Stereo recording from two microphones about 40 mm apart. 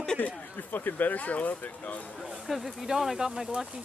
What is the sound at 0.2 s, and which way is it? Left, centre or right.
Speech, left.